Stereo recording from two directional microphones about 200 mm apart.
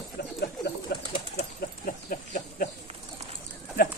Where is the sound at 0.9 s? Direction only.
50° left (ahead or behind).